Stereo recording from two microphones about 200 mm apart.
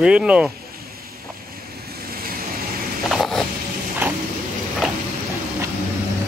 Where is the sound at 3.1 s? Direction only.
Centre (ahead or behind).